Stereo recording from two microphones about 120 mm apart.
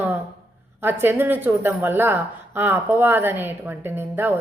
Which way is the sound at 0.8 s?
20° right (ahead or behind).